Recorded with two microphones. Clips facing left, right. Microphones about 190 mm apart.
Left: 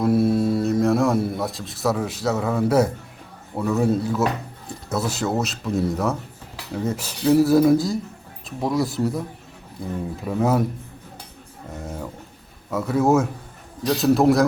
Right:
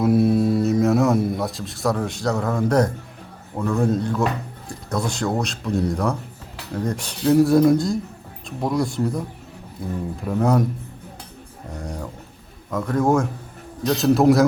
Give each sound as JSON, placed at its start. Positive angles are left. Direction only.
{"t": 0.0, "sound": "a sound", "side_deg": 0}
{"t": 3.5, "sound": "speech", "side_deg": 5}
{"t": 10.2, "sound": "speech", "side_deg": 5}
{"t": 11.7, "sound": "a man's voice", "side_deg": 5}